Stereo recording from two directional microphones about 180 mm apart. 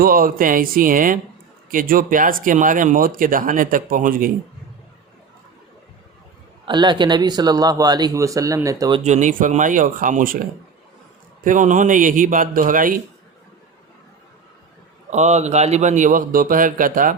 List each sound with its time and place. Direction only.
0.0 s speech: 55° right (ahead or behind)
6.7 s speech: 25° right (ahead or behind)
9.0 s speech: 40° right (ahead or behind)
11.4 s speech: 45° right (ahead or behind)
15.1 s speech: 40° right (ahead or behind)